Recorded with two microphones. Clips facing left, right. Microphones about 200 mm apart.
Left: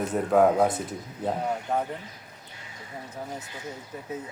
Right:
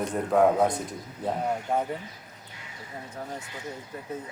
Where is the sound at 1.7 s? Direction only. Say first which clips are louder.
Even; 10° right (ahead or behind).